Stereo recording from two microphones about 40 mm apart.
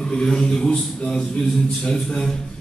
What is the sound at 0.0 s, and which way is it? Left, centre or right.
A man's voice, left.